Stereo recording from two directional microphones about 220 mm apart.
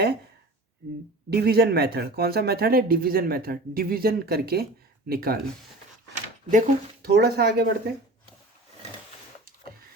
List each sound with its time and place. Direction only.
1.3 s speech: 45° right (ahead or behind)
6.5 s speech: 40° right (ahead or behind)